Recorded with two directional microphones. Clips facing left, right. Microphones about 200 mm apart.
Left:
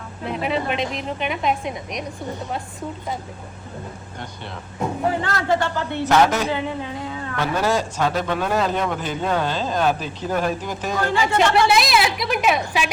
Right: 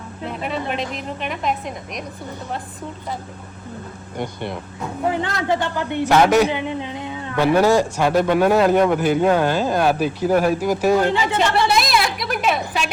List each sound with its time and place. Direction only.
0.3 s a woman's voice: centre (ahead or behind)
4.2 s speech: 15° right (ahead or behind)
11.2 s a woman's voice: centre (ahead or behind)